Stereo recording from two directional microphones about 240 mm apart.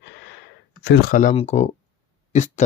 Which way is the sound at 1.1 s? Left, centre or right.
Left.